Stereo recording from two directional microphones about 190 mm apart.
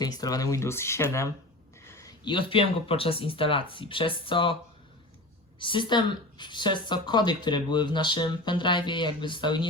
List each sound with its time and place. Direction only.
0.0 s a woman's voice: 20° left (ahead or behind)
5.5 s a woman's voice: 25° left (ahead or behind)